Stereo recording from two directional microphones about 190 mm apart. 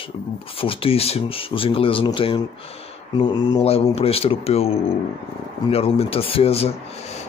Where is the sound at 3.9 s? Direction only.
30° left (ahead or behind).